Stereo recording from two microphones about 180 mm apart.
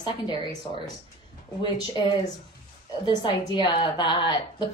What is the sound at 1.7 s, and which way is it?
A woman's voice, 25° left (ahead or behind).